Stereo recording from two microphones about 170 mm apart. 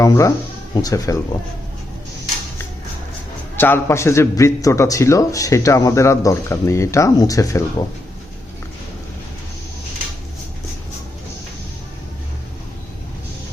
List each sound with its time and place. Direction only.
0.0 s speech: 20° left (ahead or behind)
3.5 s a man's voice: 10° left (ahead or behind)